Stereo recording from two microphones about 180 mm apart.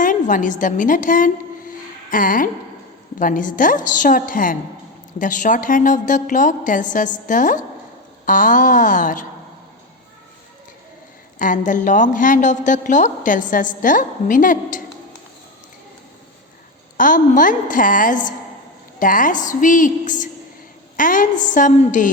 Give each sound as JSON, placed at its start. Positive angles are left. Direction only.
{"t": 0.0, "sound": "a woman's voice", "side_deg": 45}
{"t": 11.3, "sound": "a woman's voice", "side_deg": 45}
{"t": 17.0, "sound": "a woman's voice", "side_deg": 45}